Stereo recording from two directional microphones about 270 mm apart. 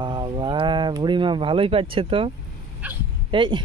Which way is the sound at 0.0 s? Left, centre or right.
Centre.